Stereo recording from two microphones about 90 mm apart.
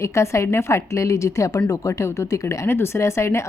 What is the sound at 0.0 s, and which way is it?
A woman's voice, 30° left (ahead or behind).